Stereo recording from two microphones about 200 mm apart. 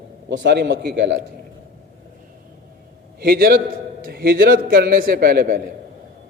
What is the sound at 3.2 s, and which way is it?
A man's voice, 50° right (ahead or behind).